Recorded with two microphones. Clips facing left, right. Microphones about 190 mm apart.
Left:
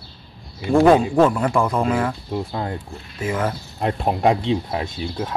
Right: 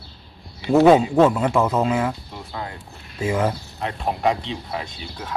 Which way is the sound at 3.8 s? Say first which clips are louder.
Left 4 dB; 45° left (ahead or behind).